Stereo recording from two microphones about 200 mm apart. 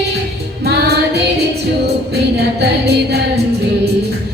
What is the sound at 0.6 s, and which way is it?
Music, 55° right (ahead or behind).